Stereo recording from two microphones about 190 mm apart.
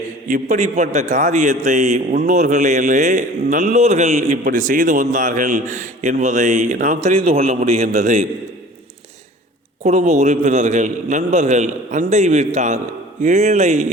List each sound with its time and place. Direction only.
0.3 s a man's voice: 40° right (ahead or behind)
9.8 s a man's voice: 35° right (ahead or behind)